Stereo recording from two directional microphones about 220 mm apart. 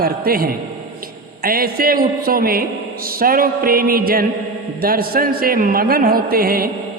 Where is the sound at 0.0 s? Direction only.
40° right (ahead or behind).